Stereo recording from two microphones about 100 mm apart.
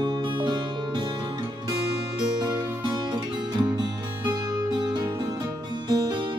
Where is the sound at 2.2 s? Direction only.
45° right (ahead or behind).